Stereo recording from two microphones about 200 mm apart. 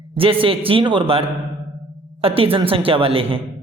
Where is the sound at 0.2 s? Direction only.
25° right (ahead or behind).